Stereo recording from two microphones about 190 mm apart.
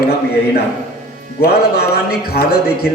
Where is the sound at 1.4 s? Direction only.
55° left (ahead or behind).